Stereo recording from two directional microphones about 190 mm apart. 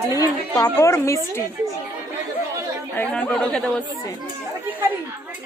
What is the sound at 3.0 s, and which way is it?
Speech, 5° left (ahead or behind).